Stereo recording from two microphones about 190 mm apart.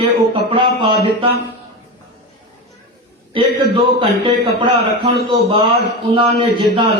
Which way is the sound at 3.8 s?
25° right (ahead or behind).